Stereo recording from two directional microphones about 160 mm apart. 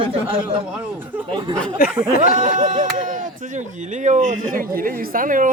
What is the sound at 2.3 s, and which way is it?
Speech, 50° right (ahead or behind).